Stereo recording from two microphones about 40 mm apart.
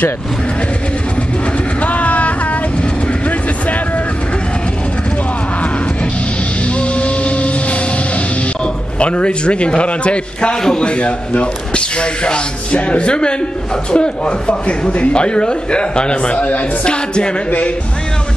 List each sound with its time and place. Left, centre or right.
1.8 s vehicle: left
6.8 s music: left
9.0 s speech: left
17.5 s speech: left